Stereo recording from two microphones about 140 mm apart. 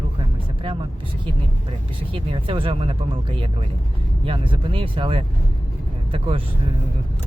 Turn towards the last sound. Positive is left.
turn(degrees=-40)  # may be behind; listen again after turning